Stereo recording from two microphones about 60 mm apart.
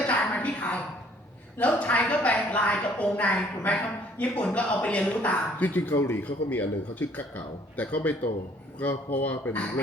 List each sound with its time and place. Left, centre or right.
0.1 s a sound: left
1.5 s speech: left
5.9 s speech: left
6.5 s speech: left